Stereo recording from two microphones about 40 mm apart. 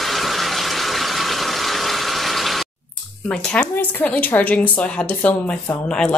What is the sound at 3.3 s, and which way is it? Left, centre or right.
Speech, centre.